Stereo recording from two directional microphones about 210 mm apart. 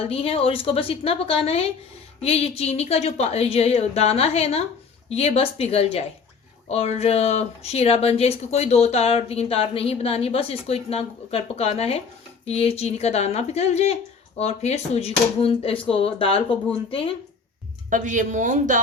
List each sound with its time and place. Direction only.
0.0 s speech: 25° left (ahead or behind)
17.9 s speech: 40° right (ahead or behind)